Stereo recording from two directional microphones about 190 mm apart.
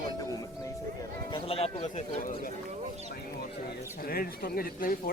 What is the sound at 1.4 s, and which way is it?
Speech, 30° left (ahead or behind).